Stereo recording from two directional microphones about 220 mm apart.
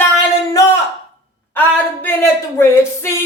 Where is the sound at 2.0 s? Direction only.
10° left (ahead or behind).